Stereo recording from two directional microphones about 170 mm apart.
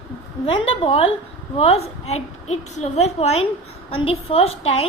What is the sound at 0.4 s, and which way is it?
A woman's voice, 35° left (ahead or behind).